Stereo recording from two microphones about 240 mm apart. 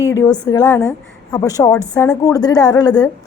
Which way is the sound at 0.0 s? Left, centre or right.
Centre.